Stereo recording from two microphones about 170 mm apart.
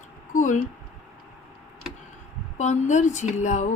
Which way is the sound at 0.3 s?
45° left (ahead or behind).